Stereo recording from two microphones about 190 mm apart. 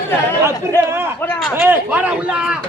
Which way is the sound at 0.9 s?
15° right (ahead or behind).